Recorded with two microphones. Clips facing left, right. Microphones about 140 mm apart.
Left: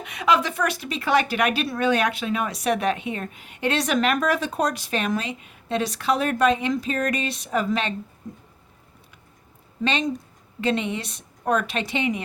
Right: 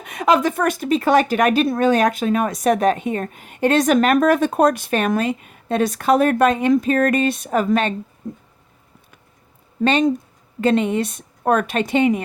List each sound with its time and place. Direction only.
0.0 s speech: 45° right (ahead or behind)
9.8 s speech: 50° right (ahead or behind)